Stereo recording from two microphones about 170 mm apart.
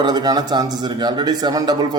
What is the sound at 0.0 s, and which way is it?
A man's voice, 25° right (ahead or behind).